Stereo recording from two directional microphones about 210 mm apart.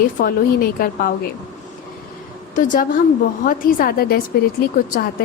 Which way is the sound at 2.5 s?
40° left (ahead or behind).